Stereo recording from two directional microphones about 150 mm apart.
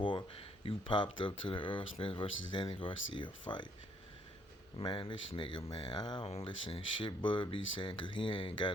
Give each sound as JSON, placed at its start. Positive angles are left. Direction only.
{"t": 0.0, "sound": "speech", "side_deg": 35}
{"t": 4.8, "sound": "speech", "side_deg": 30}
{"t": 6.2, "sound": "speech", "side_deg": 40}